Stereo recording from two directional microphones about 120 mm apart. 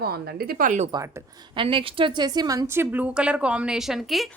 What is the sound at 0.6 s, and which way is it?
Speech, 90° right.